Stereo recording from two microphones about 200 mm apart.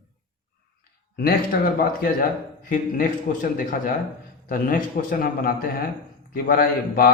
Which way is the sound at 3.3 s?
40° left (ahead or behind).